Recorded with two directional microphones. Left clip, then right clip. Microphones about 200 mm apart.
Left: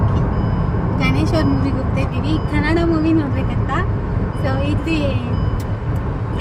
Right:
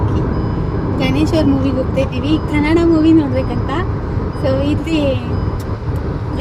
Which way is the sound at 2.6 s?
20° right (ahead or behind).